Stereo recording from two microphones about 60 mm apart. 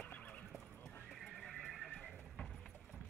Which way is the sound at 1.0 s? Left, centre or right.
Centre.